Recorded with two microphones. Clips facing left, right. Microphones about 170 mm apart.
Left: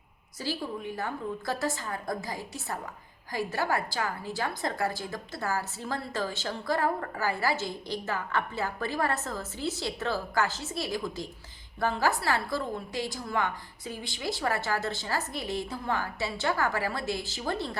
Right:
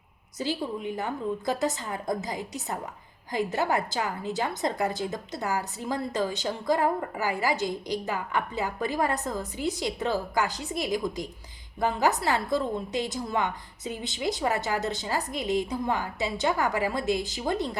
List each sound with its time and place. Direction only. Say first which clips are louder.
0.3 s a woman's voice: right 3 dB; 20° right (ahead or behind)